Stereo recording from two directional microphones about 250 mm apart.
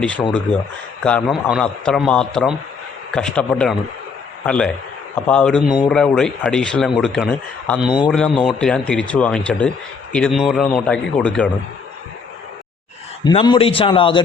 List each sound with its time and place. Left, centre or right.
1.0 s speech: centre
5.6 s speech: centre
5.9 s speech: centre
7.9 s speech: centre
8.1 s speech: centre
13.2 s a man's voice: centre